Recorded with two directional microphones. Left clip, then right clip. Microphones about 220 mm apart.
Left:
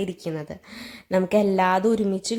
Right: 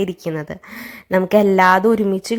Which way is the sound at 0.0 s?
15° right (ahead or behind).